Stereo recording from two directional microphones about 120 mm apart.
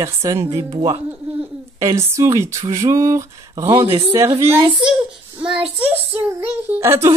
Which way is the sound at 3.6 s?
50° right (ahead or behind).